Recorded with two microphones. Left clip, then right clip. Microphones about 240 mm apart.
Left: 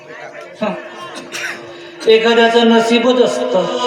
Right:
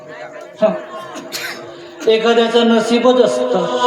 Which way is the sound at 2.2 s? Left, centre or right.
Right.